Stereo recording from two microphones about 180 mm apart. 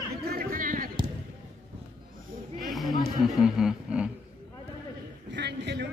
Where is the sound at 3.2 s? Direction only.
5° right (ahead or behind).